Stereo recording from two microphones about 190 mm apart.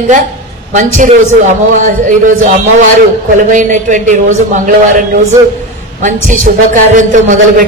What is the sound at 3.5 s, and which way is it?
Music, 40° right (ahead or behind).